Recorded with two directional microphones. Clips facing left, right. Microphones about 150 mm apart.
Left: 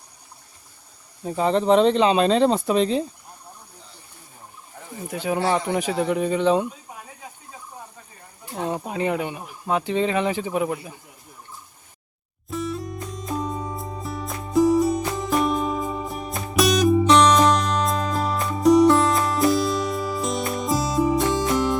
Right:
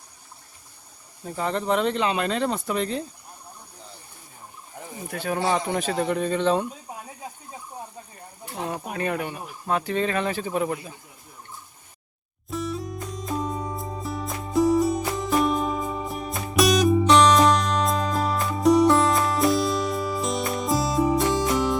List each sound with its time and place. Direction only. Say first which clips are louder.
1.2 s speech: left 6 dB; 20° left (ahead or behind)
5.0 s speech: left 2 dB; 15° left (ahead or behind)
8.7 s speech: left 3 dB; 20° left (ahead or behind)
12.5 s music: left 1 dB; centre (ahead or behind)